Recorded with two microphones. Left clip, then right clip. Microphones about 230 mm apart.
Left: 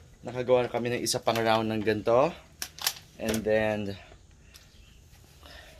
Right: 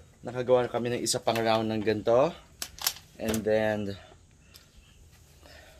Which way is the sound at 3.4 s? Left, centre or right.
Centre.